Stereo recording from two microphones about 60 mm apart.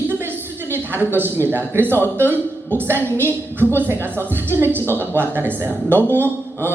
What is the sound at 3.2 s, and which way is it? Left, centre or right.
Speech, right.